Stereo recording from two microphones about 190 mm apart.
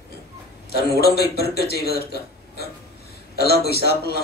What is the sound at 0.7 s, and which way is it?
A man's voice, 55° left (ahead or behind).